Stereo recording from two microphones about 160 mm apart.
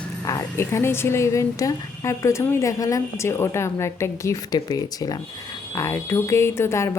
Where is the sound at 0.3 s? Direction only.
20° left (ahead or behind).